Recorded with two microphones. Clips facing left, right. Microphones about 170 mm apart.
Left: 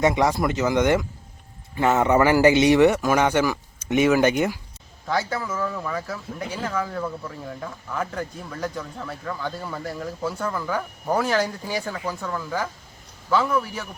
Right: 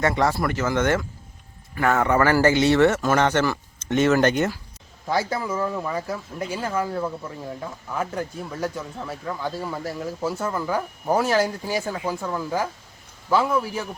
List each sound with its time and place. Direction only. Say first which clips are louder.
0.0 s speech: left 2 dB; 15° left (ahead or behind)
5.4 s speech: right 2 dB; 15° right (ahead or behind)
10.3 s speech: right 1 dB; 20° right (ahead or behind)
10.7 s speech: right 3 dB; 10° right (ahead or behind)